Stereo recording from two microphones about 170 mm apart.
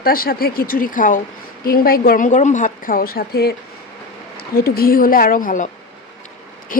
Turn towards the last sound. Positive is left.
turn(degrees=50)  # may be behind; listen again after turning